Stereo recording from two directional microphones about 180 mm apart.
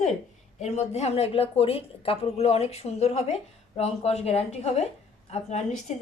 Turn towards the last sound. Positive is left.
turn(degrees=40)  # may be behind; listen again after turning